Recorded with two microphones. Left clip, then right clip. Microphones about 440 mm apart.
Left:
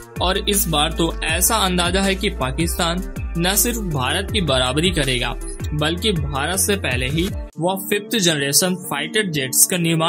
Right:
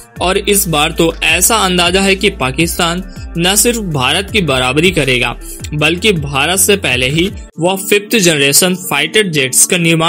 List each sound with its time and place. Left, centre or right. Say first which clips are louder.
0.2 s speech: right 7 dB; left